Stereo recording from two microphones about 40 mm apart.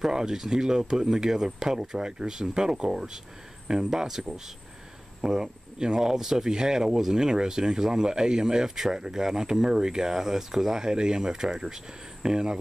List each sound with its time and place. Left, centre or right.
0.0 s speech: centre